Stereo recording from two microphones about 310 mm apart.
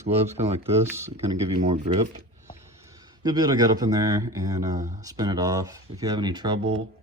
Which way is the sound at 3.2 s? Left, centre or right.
Centre.